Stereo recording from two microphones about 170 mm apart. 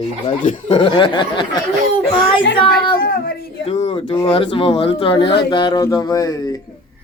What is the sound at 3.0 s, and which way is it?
Speech, 60° left (ahead or behind).